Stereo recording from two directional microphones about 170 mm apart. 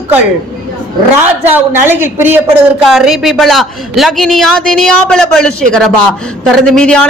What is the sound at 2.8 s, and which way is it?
Speech, centre (ahead or behind).